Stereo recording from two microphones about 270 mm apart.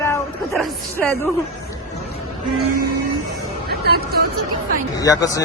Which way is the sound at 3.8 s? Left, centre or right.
Right.